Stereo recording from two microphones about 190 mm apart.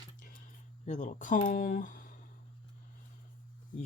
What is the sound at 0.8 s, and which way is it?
Speech, 40° left (ahead or behind).